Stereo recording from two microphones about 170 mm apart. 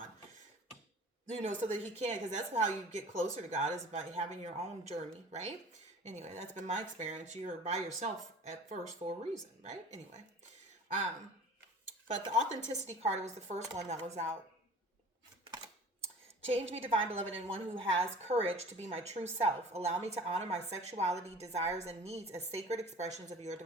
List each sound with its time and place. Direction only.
1.3 s a woman's voice: 40° right (ahead or behind)
12.2 s a woman's voice: 40° right (ahead or behind)
16.4 s a woman's voice: 35° right (ahead or behind)